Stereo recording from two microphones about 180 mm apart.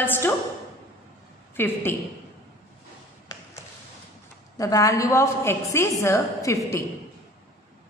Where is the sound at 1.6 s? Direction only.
10° left (ahead or behind).